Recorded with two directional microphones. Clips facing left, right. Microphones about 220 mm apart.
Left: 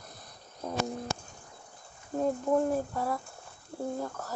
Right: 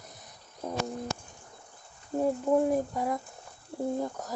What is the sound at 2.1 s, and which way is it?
Speech, 10° right (ahead or behind).